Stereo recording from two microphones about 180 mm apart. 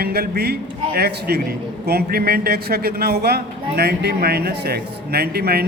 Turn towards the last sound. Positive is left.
turn(degrees=-60)  # may be behind; listen again after turning